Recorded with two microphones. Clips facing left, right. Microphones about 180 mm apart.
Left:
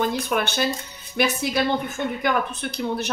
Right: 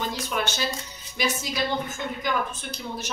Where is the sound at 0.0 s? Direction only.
55° left (ahead or behind).